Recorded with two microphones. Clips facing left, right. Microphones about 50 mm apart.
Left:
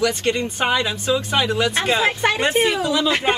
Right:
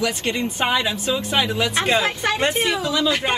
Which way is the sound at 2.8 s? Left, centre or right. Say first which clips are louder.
Left 1 dB; centre.